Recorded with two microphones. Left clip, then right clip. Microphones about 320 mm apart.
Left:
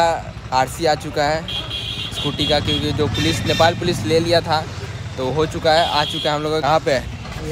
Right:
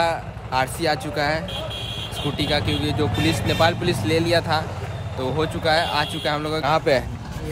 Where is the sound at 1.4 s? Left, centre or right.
Right.